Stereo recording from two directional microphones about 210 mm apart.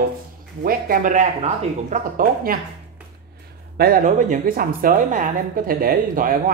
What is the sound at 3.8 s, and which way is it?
A woman's voice, 40° right (ahead or behind).